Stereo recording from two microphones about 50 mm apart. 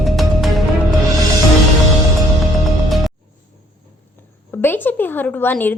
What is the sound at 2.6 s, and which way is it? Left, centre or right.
Music, centre.